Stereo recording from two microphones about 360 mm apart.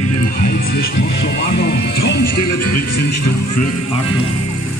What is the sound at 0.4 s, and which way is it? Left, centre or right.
Music, left.